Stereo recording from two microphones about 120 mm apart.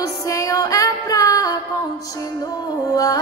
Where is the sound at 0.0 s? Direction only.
30° left (ahead or behind).